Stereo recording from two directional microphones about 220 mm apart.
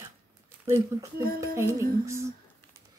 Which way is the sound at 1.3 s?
15° right (ahead or behind).